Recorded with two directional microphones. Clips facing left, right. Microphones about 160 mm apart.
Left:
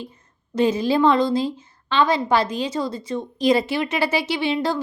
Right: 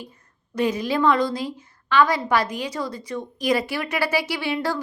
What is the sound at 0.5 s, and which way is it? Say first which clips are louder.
A woman's voice: left 4 dB; 25° left (ahead or behind).